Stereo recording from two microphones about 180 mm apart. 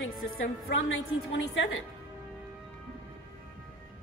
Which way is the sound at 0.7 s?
90° left.